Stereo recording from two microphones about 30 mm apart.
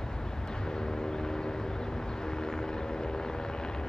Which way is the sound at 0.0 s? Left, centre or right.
Left.